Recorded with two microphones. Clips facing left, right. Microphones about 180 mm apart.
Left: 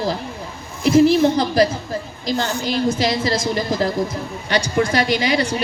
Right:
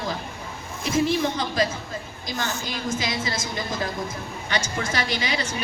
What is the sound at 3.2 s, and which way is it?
A woman's voice, 70° left (ahead or behind).